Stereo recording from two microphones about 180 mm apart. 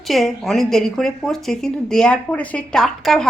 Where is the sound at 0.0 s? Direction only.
Centre (ahead or behind).